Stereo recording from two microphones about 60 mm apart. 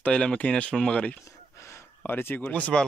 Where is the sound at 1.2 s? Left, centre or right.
Left.